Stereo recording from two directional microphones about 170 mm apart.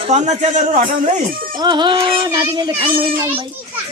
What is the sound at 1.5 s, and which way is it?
Speech, 25° right (ahead or behind).